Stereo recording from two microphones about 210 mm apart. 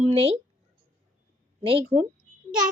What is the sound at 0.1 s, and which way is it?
Speech, 30° right (ahead or behind).